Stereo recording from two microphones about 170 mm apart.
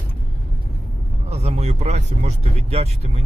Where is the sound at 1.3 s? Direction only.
40° right (ahead or behind).